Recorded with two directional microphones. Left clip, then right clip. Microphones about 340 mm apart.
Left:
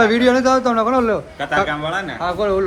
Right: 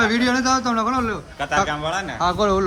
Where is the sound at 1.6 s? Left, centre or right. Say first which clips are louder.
Left 2 dB; right.